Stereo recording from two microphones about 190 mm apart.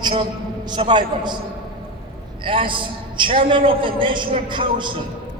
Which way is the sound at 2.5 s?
25° right (ahead or behind).